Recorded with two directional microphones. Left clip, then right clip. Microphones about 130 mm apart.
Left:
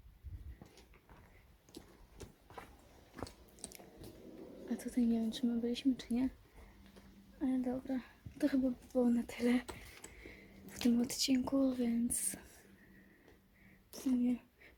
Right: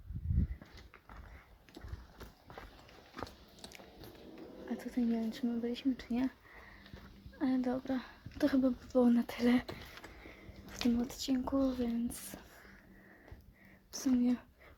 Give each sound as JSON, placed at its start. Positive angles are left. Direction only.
{"t": 3.2, "sound": "biting", "side_deg": 0}
{"t": 4.7, "sound": "speech", "side_deg": 15}
{"t": 7.3, "sound": "speech", "side_deg": -20}
{"t": 10.2, "sound": "a sound", "side_deg": 0}
{"t": 10.8, "sound": "speech", "side_deg": 20}
{"t": 14.2, "sound": "speech", "side_deg": -5}